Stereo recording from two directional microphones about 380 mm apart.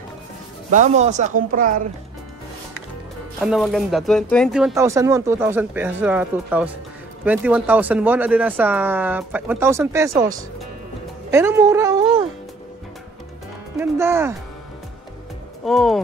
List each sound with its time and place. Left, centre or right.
0.7 s speech: centre
3.3 s speech: centre
13.7 s speech: centre
15.6 s speech: centre